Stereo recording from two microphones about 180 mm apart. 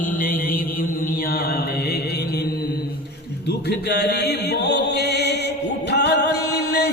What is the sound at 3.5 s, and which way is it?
Music, 65° left (ahead or behind).